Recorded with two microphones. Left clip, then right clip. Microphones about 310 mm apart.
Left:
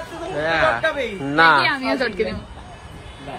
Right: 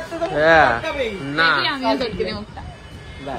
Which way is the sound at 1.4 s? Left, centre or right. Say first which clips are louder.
Left 3 dB; centre.